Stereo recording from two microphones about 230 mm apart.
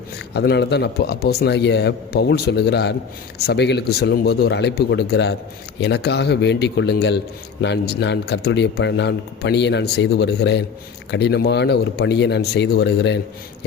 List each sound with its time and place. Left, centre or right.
0.3 s speech: left